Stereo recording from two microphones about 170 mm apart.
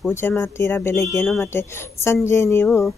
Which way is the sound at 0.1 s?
15° left (ahead or behind).